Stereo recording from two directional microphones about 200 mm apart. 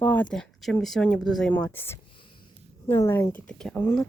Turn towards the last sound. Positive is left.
turn(degrees=5)  # may be behind; listen again after turning